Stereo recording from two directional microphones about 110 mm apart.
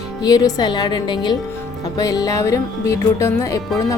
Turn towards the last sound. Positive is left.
turn(degrees=25)  # may be behind; listen again after turning